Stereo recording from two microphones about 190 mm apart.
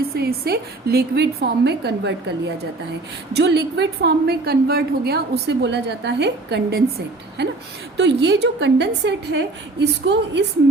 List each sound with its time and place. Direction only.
0.0 s a woman's voice: 55° right (ahead or behind)
7.9 s a woman's voice: 65° right (ahead or behind)